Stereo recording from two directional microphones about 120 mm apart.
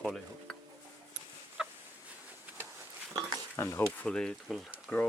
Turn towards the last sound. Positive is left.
turn(degrees=20)  # may be behind; listen again after turning